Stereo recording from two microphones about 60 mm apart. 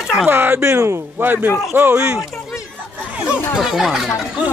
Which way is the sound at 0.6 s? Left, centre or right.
Right.